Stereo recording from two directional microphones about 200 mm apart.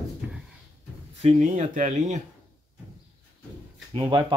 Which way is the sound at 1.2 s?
35° right (ahead or behind).